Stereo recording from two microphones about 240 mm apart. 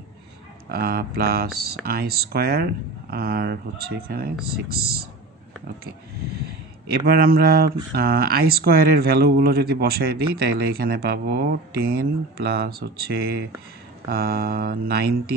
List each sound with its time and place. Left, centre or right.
0.7 s speech: right
6.9 s speech: right